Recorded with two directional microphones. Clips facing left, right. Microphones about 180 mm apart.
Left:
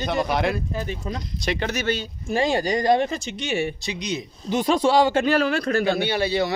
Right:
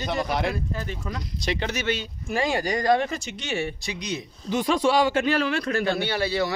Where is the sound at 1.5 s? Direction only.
50° left (ahead or behind); by 4.6 s 20° left (ahead or behind).